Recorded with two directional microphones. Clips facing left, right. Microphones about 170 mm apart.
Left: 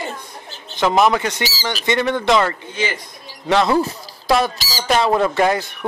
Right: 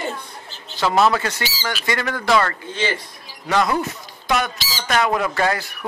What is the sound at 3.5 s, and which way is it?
Speech, 25° left (ahead or behind).